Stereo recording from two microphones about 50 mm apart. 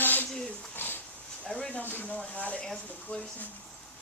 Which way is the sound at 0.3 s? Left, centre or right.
Centre.